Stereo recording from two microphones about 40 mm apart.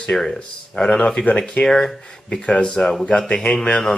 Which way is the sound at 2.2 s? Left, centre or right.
Left.